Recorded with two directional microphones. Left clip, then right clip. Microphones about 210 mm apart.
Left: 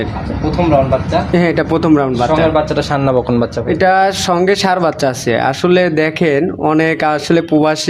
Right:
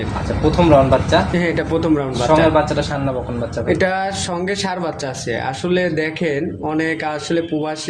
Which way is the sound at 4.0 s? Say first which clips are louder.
Left 9 dB; 45° left (ahead or behind).